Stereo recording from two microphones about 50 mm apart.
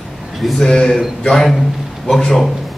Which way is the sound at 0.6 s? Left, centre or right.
Centre.